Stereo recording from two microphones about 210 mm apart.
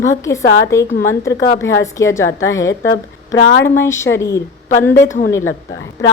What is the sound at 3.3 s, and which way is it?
Speech, 60° left (ahead or behind).